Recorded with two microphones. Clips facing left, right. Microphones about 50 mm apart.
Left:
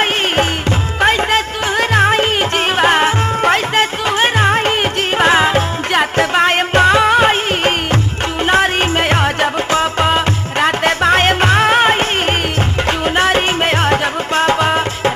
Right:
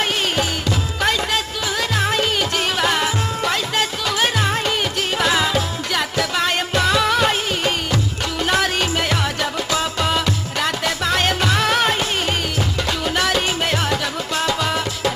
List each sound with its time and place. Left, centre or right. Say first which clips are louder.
1.0 s music: left 7 dB; left